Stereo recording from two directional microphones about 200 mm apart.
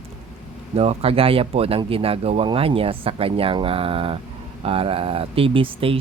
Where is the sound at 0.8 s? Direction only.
30° right (ahead or behind).